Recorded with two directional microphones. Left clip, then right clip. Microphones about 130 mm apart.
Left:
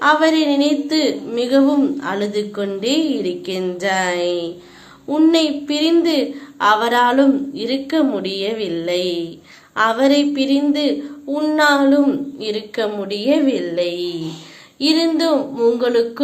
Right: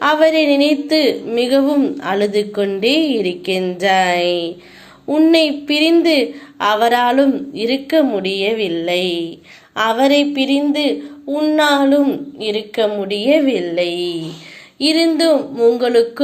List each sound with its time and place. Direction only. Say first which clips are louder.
0.0 s a woman's voice: right 2 dB; 20° right (ahead or behind)